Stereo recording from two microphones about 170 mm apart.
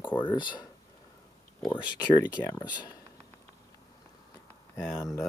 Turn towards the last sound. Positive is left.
turn(degrees=0)  # may be behind; listen again after turning